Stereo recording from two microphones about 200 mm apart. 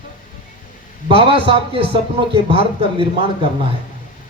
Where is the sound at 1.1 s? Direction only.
25° right (ahead or behind).